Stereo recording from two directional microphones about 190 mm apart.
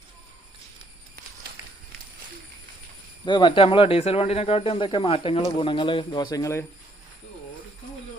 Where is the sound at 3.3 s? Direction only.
25° left (ahead or behind).